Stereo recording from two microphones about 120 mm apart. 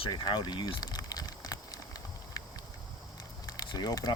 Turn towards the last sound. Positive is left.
turn(degrees=35)  # may be behind; listen again after turning